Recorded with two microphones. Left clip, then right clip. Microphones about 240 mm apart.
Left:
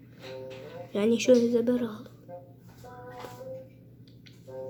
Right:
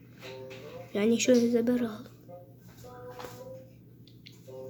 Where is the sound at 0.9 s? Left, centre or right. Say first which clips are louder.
Left 2 dB; centre.